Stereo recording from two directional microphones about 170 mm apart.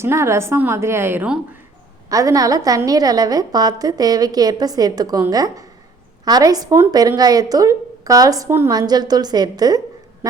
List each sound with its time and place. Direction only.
0.0 s a woman's voice: 15° right (ahead or behind)